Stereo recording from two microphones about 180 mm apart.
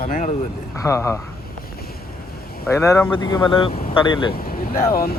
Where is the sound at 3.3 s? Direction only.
25° left (ahead or behind).